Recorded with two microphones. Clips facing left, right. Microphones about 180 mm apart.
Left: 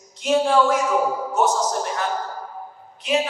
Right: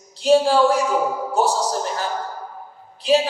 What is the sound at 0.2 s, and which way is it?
A woman's voice, 35° right (ahead or behind).